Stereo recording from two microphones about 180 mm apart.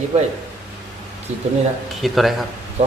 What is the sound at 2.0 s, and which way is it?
Speech, centre (ahead or behind).